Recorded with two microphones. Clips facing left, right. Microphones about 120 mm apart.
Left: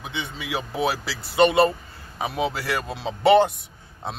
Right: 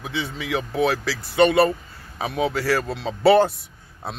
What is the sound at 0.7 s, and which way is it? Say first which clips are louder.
A man's voice: right 3 dB; 25° left (ahead or behind).